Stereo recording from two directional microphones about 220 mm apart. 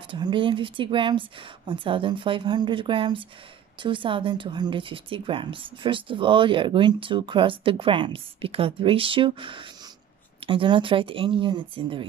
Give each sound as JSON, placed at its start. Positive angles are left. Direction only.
{"t": 0.1, "sound": "speech", "side_deg": -20}